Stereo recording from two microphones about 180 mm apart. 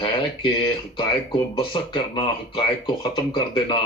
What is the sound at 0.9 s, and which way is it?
Speech, 25° left (ahead or behind).